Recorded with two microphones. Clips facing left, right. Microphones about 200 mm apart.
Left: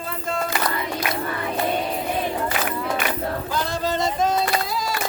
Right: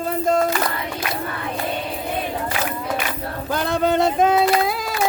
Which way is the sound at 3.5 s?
60° right (ahead or behind).